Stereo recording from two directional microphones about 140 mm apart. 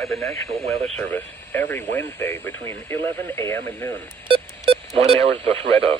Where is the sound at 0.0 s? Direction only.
Centre (ahead or behind); by 3.9 s 20° left (ahead or behind).